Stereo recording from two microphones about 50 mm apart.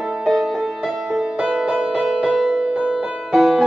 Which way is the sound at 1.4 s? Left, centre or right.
Centre.